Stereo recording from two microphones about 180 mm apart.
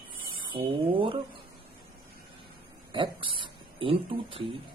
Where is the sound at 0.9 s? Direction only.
30° right (ahead or behind).